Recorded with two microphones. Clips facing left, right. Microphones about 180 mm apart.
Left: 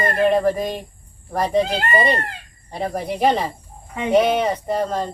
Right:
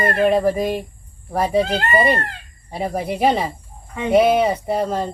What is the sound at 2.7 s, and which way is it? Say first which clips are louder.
Speech: right 1 dB; 10° right (ahead or behind).